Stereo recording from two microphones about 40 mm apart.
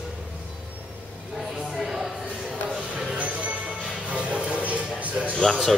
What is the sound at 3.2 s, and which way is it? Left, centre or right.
Music, right.